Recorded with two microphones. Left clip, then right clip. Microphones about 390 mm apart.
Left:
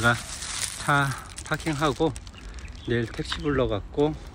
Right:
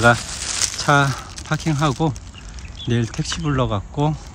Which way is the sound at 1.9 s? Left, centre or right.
Right.